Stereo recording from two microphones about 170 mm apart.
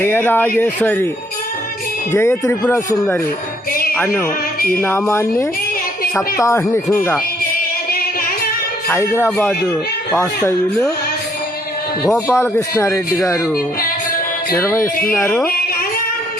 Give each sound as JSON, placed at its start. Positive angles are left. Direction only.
{"t": 0.0, "sound": "speech", "side_deg": 10}
{"t": 2.1, "sound": "speech", "side_deg": 15}
{"t": 3.9, "sound": "music", "side_deg": 10}
{"t": 4.7, "sound": "speech", "side_deg": 10}
{"t": 8.9, "sound": "speech", "side_deg": 15}
{"t": 12.3, "sound": "speech", "side_deg": 15}
{"t": 14.5, "sound": "speech", "side_deg": 15}